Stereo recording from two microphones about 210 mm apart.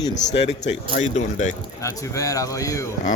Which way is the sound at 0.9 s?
35° left (ahead or behind).